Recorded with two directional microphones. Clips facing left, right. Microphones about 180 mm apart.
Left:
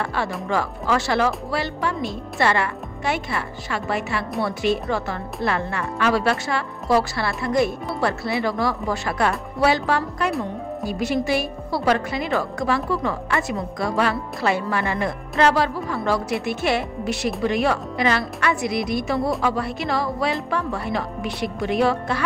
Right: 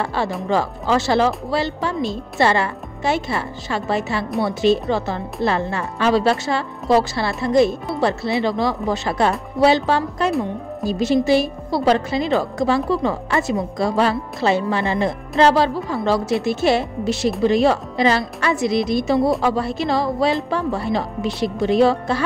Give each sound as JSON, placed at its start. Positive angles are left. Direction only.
{"t": 0.0, "sound": "a woman's voice", "side_deg": -30}